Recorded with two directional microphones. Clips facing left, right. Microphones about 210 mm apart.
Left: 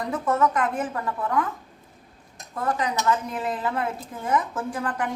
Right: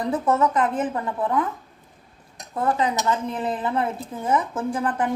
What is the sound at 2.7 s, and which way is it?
Speech, 25° right (ahead or behind).